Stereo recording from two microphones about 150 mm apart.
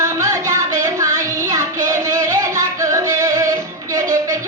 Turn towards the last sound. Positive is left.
turn(degrees=-20)  # may be behind; listen again after turning